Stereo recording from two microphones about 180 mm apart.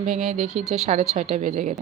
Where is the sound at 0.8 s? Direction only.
40° right (ahead or behind).